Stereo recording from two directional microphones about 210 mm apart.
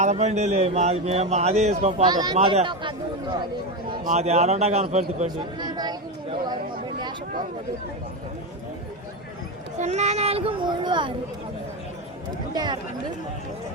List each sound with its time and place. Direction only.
0.0 s speech: 35° right (ahead or behind)
2.0 s speech: 20° right (ahead or behind)
4.0 s speech: 30° right (ahead or behind)
9.7 s speech: 35° right (ahead or behind)
12.5 s speech: 20° right (ahead or behind)